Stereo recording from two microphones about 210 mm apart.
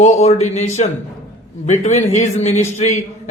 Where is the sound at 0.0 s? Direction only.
30° left (ahead or behind).